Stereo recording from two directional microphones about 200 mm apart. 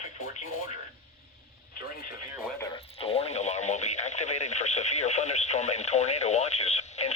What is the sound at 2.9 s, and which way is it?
Speech, 30° left (ahead or behind).